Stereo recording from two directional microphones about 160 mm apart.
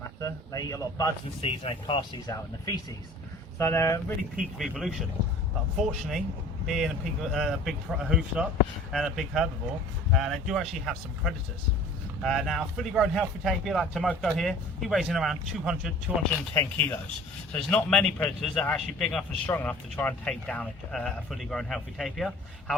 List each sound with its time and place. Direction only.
0.2 s a sound: 20° left (ahead or behind)
1.4 s speech: 35° left (ahead or behind); by 4.0 s 20° left (ahead or behind)
4.5 s speech: centre (ahead or behind)
16.6 s speech: 15° left (ahead or behind)